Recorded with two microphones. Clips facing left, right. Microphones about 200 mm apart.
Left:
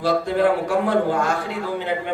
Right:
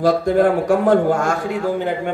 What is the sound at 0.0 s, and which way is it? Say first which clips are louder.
A man's voice: right 4 dB; 45° right (ahead or behind).